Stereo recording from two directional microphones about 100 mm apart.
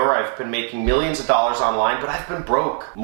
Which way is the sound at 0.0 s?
15° right (ahead or behind).